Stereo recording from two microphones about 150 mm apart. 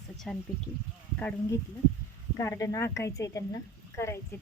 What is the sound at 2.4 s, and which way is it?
A woman's voice, 20° left (ahead or behind).